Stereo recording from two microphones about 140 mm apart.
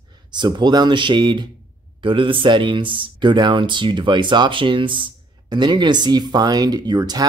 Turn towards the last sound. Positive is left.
turn(degrees=-30)  # may be behind; listen again after turning